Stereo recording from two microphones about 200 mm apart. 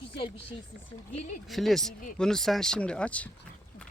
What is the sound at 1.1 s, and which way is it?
Speech, 35° left (ahead or behind).